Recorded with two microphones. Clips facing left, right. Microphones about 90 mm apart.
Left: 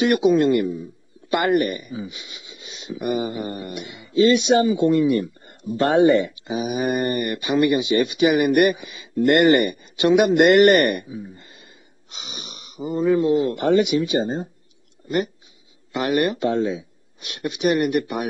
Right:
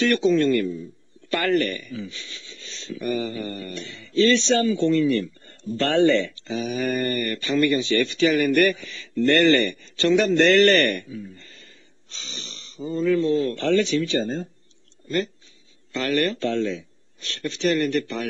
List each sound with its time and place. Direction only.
0.0 s speech: 15° left (ahead or behind)